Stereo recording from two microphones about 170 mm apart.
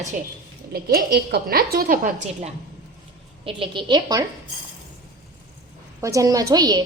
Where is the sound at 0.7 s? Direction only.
65° right (ahead or behind).